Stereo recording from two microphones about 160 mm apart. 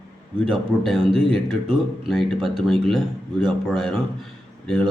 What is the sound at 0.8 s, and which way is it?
A man's voice, centre (ahead or behind).